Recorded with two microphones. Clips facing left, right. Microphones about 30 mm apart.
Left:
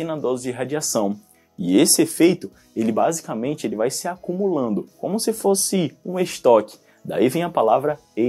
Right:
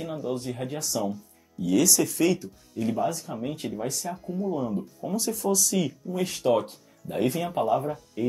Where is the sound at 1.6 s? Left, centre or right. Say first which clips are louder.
Left 6 dB; left.